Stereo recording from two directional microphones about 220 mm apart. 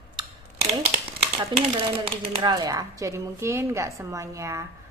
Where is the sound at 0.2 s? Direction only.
25° right (ahead or behind).